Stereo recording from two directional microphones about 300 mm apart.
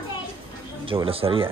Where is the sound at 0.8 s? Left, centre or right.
Centre.